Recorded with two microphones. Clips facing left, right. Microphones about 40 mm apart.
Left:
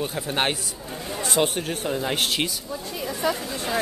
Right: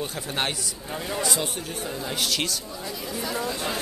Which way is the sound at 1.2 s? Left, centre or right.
Left.